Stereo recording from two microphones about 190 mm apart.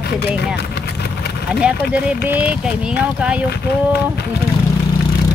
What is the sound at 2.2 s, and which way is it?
Speech, 10° right (ahead or behind).